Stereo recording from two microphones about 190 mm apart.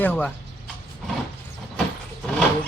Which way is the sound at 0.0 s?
10° left (ahead or behind).